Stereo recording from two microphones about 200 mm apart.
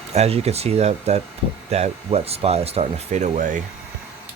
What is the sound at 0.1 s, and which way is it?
Speech, 30° right (ahead or behind).